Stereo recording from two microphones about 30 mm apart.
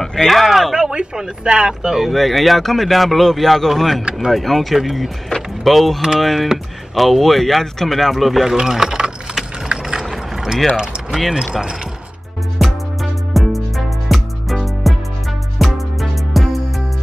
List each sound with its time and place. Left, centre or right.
0.2 s speech: centre
0.7 s speech: right
1.7 s speech: centre
2.0 s speech: centre
8.5 s speech: centre
9.7 s vehicle: right
10.0 s boat: centre
12.5 s music: centre